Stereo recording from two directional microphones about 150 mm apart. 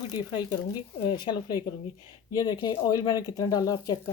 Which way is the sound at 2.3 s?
25° left (ahead or behind).